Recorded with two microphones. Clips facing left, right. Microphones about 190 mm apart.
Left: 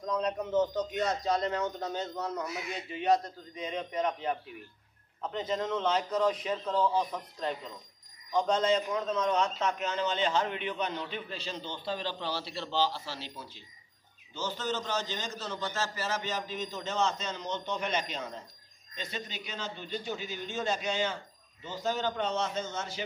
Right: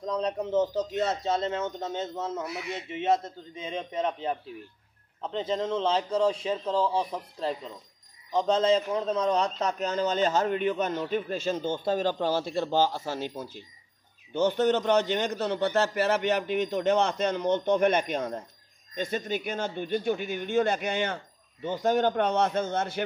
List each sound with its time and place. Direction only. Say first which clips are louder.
0.0 s a man's voice: right 2 dB; 30° right (ahead or behind); by 13.7 s 50° right (ahead or behind)
14.3 s a man's voice: right 11 dB; 60° right (ahead or behind)